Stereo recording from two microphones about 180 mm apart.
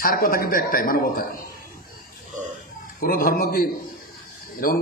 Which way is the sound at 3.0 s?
55° left (ahead or behind).